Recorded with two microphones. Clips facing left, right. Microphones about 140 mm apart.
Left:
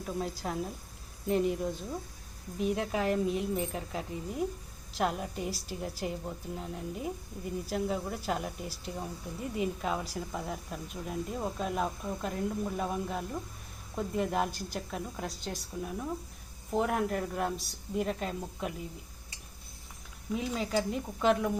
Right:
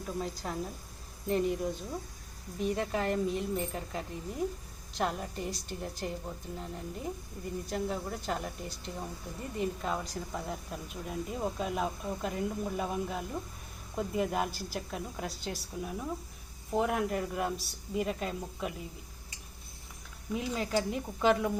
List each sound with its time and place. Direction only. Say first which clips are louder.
0.2 s a woman's voice: left 2 dB; centre (ahead or behind)
20.3 s a woman's voice: even; centre (ahead or behind)